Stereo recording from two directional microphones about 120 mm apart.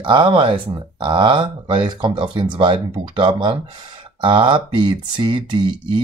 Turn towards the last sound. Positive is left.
turn(degrees=-40)  # may be behind; listen again after turning